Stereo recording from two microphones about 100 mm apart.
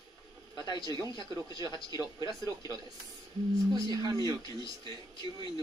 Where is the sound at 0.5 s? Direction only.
45° left (ahead or behind).